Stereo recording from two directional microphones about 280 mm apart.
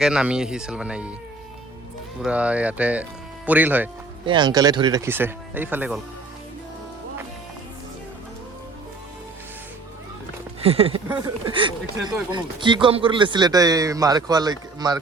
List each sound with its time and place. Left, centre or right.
0.0 s speech: centre
2.2 s speech: centre
10.6 s speech: right